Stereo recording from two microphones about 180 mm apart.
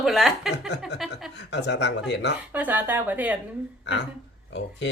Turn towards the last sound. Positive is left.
turn(degrees=80)